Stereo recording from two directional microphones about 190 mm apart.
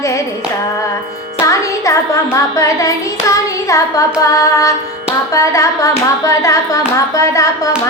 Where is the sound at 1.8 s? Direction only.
15° left (ahead or behind).